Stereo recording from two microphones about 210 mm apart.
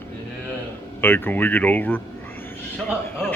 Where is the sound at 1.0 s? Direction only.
10° left (ahead or behind).